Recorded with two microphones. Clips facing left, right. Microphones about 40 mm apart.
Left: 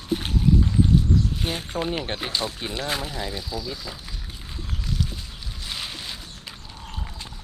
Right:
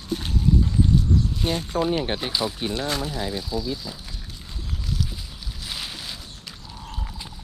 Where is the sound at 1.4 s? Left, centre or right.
Left.